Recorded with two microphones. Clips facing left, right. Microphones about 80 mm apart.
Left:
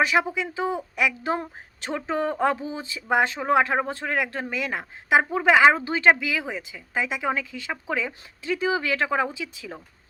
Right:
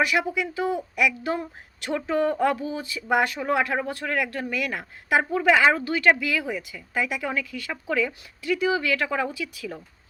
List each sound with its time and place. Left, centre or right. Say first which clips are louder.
0.0 s a woman's voice: left 1 dB; left